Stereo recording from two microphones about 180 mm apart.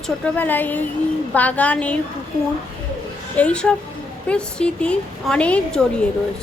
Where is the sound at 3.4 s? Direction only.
5° left (ahead or behind).